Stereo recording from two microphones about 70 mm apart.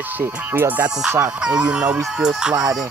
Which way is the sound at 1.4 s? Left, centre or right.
Centre.